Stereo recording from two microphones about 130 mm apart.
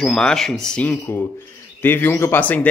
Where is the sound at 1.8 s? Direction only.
15° left (ahead or behind).